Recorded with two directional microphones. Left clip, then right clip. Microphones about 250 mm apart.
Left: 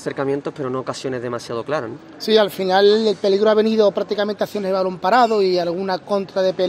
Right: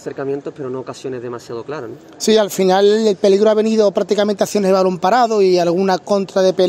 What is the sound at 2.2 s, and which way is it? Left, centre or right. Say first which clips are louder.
Speech: right 3 dB; right.